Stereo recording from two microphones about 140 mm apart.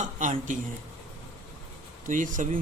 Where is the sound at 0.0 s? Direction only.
65° right (ahead or behind).